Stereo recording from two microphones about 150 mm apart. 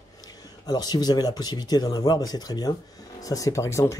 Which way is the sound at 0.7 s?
25° left (ahead or behind).